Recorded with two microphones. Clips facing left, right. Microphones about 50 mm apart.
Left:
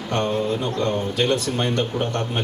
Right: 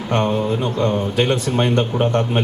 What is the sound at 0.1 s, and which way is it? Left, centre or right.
A man's voice, right.